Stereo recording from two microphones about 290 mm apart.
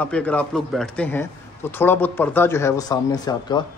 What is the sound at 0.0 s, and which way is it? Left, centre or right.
A man's voice, centre.